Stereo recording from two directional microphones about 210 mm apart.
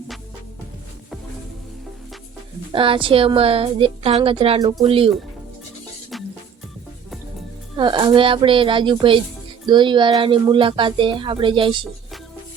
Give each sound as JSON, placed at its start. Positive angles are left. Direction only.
{"t": 2.7, "sound": "a woman's voice", "side_deg": -25}
{"t": 7.8, "sound": "a woman's voice", "side_deg": -20}